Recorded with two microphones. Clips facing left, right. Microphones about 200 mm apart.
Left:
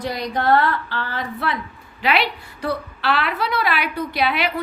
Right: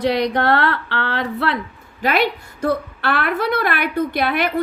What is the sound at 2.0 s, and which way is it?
A woman's voice, 45° right (ahead or behind).